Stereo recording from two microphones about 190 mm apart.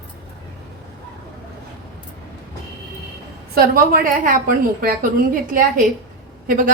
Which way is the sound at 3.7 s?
50° right (ahead or behind).